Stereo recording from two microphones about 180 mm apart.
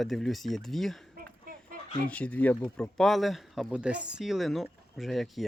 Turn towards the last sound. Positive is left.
turn(degrees=0)  # may be behind; listen again after turning